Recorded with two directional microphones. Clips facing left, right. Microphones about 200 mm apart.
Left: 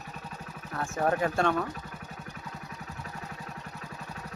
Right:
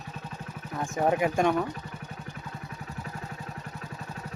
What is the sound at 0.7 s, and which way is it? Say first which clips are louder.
Speech: right 2 dB; 15° right (ahead or behind).